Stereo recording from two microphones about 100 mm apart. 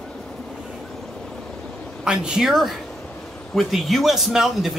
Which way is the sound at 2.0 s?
5° right (ahead or behind).